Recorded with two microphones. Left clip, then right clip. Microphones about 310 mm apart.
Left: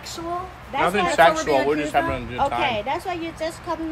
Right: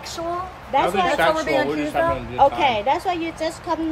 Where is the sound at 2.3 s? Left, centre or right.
Right.